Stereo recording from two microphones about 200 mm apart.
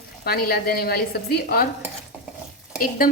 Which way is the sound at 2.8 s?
45° left (ahead or behind).